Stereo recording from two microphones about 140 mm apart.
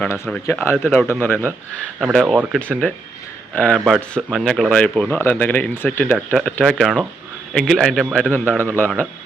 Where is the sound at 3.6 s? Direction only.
5° left (ahead or behind).